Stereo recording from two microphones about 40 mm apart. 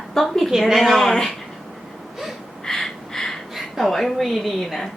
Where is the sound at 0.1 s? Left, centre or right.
Centre.